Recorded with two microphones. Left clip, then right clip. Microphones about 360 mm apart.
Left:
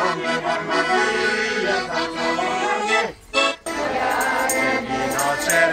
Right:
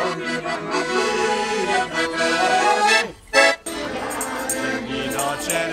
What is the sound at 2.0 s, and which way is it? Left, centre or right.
Accordion, right.